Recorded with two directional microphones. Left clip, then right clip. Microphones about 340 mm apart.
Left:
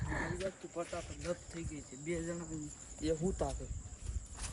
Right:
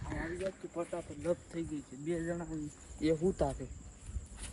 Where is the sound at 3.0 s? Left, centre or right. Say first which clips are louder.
Right 5 dB; centre.